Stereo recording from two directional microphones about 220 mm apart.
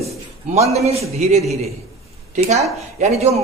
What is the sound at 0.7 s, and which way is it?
Speech, 30° right (ahead or behind).